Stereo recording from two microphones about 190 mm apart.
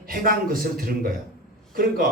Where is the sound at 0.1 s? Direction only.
50° right (ahead or behind).